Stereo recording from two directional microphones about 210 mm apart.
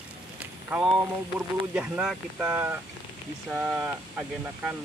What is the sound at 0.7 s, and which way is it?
Speech, 5° right (ahead or behind).